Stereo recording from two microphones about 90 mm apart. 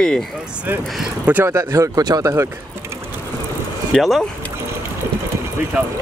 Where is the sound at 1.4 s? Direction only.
35° right (ahead or behind).